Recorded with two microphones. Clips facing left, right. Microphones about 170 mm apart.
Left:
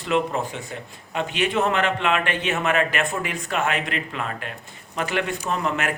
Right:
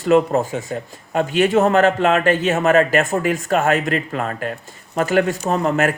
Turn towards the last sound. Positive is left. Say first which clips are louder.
# right 7 dB
turn(degrees=-40)  # may be behind; listen again after turning